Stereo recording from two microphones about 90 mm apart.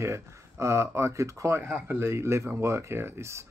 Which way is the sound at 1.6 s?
25° right (ahead or behind).